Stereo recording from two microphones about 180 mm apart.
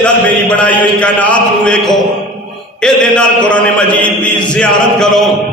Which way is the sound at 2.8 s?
5° left (ahead or behind).